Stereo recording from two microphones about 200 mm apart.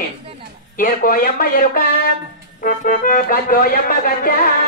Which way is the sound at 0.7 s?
45° left (ahead or behind).